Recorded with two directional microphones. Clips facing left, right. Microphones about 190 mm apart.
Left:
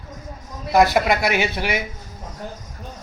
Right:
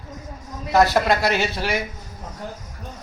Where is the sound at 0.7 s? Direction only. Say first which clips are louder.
Left 1 dB; 15° left (ahead or behind).